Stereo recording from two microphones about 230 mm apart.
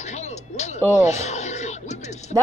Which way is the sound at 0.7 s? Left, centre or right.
Centre.